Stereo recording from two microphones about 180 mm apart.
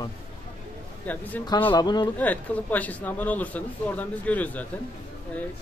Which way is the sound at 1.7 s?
25° left (ahead or behind).